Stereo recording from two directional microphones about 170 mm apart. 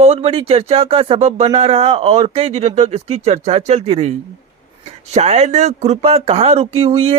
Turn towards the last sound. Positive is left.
turn(degrees=-35)  # may be behind; listen again after turning